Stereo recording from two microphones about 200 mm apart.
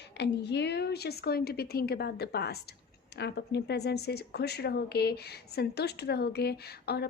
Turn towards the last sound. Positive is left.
turn(degrees=55)  # may be behind; listen again after turning